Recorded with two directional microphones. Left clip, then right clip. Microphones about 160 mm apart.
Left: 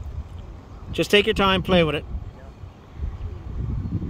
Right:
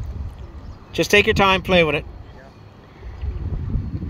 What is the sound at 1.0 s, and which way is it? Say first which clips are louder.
Speech: right 3 dB; 10° left (ahead or behind).